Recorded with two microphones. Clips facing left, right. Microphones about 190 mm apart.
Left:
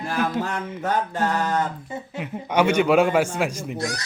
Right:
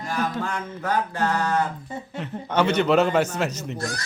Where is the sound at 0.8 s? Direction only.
20° left (ahead or behind).